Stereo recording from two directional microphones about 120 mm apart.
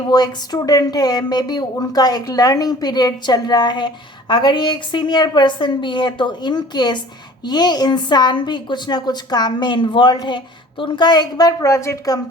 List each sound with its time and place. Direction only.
0.1 s speech: 35° left (ahead or behind)